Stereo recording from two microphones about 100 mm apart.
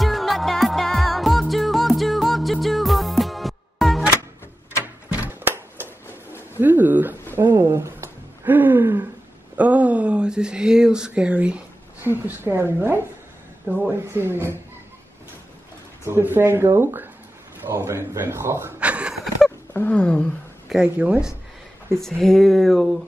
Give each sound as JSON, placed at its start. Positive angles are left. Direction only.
{"t": 0.0, "sound": "music", "side_deg": 0}
{"t": 5.1, "sound": "a sound", "side_deg": -20}
{"t": 6.6, "sound": "pigeon", "side_deg": -20}
{"t": 7.3, "sound": "a sound", "side_deg": -25}
{"t": 12.0, "sound": "speech", "side_deg": -20}
{"t": 16.0, "sound": "speech", "side_deg": -20}
{"t": 18.8, "sound": "a sound", "side_deg": -15}
{"t": 19.7, "sound": "speech", "side_deg": 20}
{"t": 20.0, "sound": "speech", "side_deg": 10}
{"t": 20.6, "sound": "speech", "side_deg": -5}
{"t": 21.9, "sound": "speech", "side_deg": 5}